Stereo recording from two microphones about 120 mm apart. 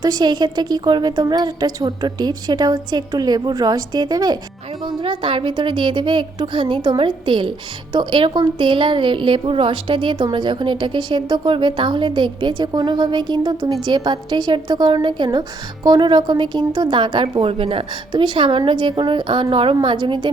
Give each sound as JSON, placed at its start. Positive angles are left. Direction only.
{"t": 0.0, "sound": "a woman's voice", "side_deg": -35}